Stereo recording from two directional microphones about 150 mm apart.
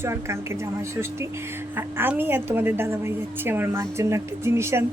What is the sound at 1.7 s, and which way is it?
A woman's voice, 15° right (ahead or behind).